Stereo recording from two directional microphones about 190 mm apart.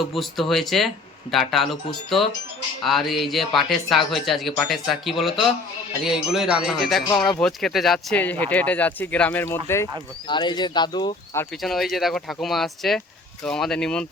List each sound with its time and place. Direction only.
0.0 s speech: centre (ahead or behind)
10.2 s speech: 25° left (ahead or behind)
11.6 s speech: centre (ahead or behind)